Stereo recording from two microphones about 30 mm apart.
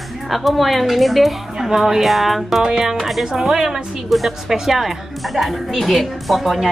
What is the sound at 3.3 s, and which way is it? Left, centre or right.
A woman's voice, centre.